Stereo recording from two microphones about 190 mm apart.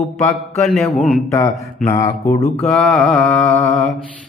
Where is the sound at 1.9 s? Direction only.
15° left (ahead or behind).